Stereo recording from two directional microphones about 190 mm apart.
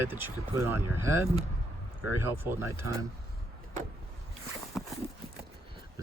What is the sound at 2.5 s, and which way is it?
Speech, 15° right (ahead or behind).